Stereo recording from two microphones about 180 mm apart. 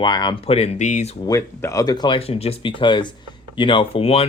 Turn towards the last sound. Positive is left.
turn(degrees=35)  # may be behind; listen again after turning